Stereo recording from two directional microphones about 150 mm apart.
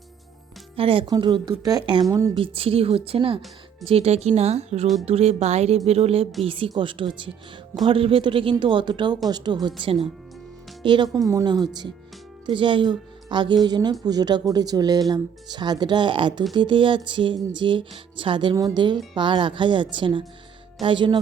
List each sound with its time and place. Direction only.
0.8 s music: 35° right (ahead or behind)
1.0 s speech: 30° right (ahead or behind)
2.3 s music: 40° right (ahead or behind)
3.8 s a woman's voice: 40° right (ahead or behind)
6.4 s music: 35° right (ahead or behind)
9.3 s speech: 30° right (ahead or behind)
9.8 s music: 40° right (ahead or behind)
10.8 s speech: 30° right (ahead or behind)
16.6 s music: 35° right (ahead or behind)